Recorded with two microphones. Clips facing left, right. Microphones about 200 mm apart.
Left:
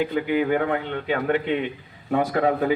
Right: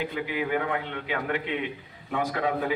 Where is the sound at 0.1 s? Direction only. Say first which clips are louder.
Left 7 dB; 40° left (ahead or behind).